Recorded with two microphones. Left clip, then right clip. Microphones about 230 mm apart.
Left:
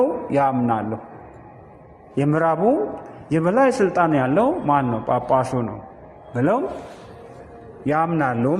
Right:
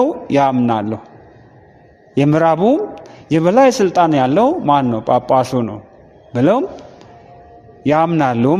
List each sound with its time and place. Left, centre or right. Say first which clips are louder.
0.3 s a man's voice: right 5 dB; right
2.1 s a man's voice: right 6 dB; right
7.9 s a man's voice: right 6 dB; right